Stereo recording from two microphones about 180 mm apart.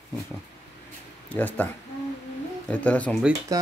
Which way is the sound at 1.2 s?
10° left (ahead or behind).